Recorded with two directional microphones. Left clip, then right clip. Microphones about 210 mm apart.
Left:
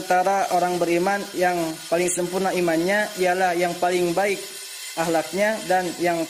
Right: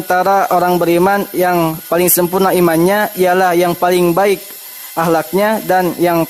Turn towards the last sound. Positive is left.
turn(degrees=-35)  # may be behind; listen again after turning